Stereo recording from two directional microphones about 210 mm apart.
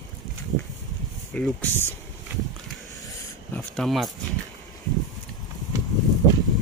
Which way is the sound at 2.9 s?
15° left (ahead or behind).